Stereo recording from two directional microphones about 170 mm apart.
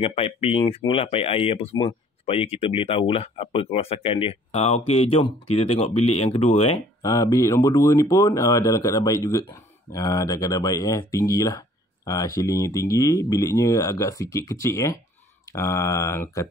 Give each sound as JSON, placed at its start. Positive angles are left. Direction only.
{"t": 0.0, "sound": "speech", "side_deg": 35}
{"t": 7.0, "sound": "speech", "side_deg": 20}